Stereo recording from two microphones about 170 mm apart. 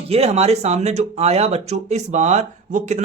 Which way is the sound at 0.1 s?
40° right (ahead or behind).